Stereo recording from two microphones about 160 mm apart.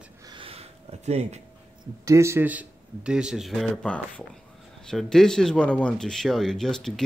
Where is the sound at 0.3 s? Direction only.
35° right (ahead or behind).